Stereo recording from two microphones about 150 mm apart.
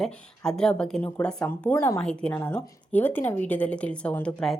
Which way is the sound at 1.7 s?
20° left (ahead or behind).